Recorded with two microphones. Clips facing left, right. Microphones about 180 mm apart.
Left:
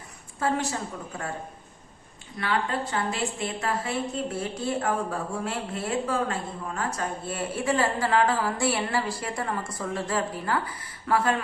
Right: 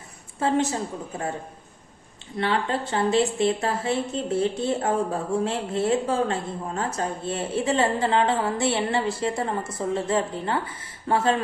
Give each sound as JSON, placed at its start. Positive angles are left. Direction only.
{"t": 0.3, "sound": "a woman's voice", "side_deg": -25}
{"t": 2.4, "sound": "a woman's voice", "side_deg": -25}